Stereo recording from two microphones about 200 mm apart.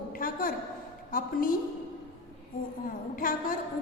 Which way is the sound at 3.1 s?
45° left (ahead or behind).